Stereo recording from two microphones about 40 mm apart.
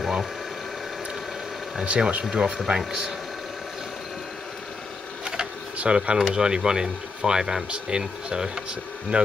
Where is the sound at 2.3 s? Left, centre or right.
Right.